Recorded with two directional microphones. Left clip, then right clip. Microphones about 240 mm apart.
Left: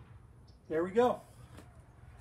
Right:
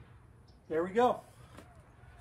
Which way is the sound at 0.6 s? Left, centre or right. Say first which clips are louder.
Even; centre.